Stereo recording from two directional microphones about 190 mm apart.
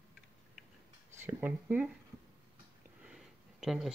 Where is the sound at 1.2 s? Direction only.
10° right (ahead or behind).